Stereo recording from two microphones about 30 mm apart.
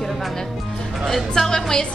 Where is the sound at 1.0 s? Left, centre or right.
Centre.